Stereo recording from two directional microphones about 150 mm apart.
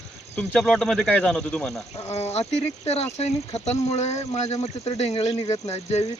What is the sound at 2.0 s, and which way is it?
Speech, 45° left (ahead or behind).